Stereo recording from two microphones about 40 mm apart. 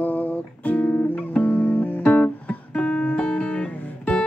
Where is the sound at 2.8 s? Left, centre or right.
Left.